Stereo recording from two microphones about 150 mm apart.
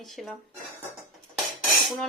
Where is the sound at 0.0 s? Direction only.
Centre (ahead or behind).